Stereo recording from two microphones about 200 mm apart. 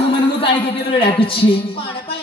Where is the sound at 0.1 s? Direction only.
25° left (ahead or behind).